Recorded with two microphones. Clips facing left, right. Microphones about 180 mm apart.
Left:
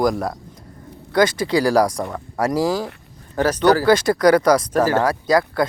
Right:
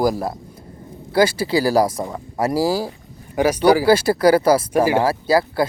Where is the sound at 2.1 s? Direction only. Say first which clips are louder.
Even; 25° right (ahead or behind).